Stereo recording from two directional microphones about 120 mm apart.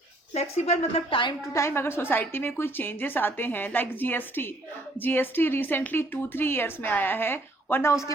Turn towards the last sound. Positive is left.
turn(degrees=20)  # may be behind; listen again after turning